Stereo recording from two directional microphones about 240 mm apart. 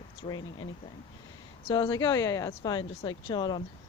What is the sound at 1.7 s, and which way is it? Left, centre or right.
Speech, centre.